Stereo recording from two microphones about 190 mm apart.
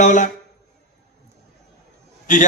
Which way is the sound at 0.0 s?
40° left (ahead or behind).